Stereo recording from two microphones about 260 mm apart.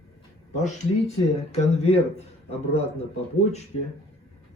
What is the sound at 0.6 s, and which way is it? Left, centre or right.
A man's voice, left.